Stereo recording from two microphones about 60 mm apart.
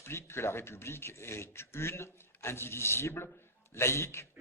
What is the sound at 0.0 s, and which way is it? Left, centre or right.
Speech, left.